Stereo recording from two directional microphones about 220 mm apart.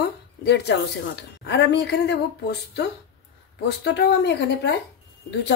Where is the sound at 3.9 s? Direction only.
50° left (ahead or behind).